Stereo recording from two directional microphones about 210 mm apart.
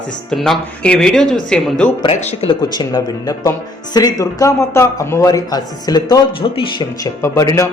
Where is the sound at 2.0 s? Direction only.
30° left (ahead or behind).